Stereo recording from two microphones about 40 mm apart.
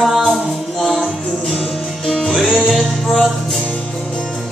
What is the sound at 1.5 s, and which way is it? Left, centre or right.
Music, left.